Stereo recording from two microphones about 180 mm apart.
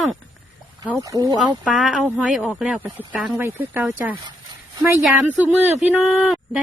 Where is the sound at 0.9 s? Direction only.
20° right (ahead or behind).